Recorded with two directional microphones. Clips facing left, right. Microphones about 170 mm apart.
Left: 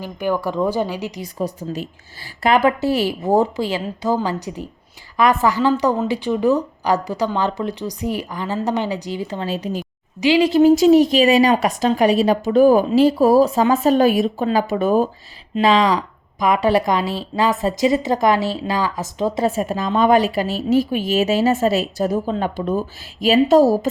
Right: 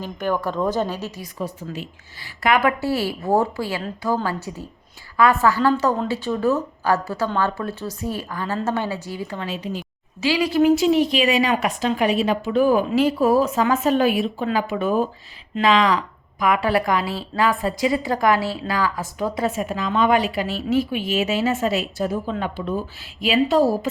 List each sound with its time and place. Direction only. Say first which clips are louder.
0.0 s a woman's voice: left 2 dB; 10° left (ahead or behind)
1.4 s a woman's voice: left 5 dB; 40° left (ahead or behind)
2.6 s a woman's voice: left 4 dB; 20° left (ahead or behind)
9.5 s a woman's voice: left 4 dB; 40° left (ahead or behind)
10.2 s a woman's voice: left 5 dB; 25° left (ahead or behind); by 23.9 s 40° left (ahead or behind)